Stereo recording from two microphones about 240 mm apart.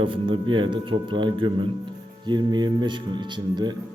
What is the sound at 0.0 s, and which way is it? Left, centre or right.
A man's voice, right.